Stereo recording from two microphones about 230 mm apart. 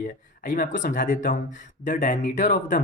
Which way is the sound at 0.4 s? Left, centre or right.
Left.